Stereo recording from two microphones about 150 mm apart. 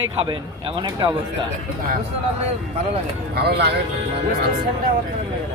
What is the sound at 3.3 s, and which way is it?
Speech, 90° right.